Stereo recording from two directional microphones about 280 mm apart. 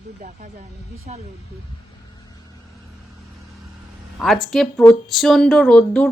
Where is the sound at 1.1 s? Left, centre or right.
Right.